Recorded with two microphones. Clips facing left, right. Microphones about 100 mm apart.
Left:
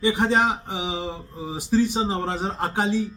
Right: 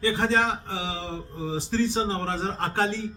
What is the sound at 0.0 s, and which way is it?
Speech, 15° left (ahead or behind).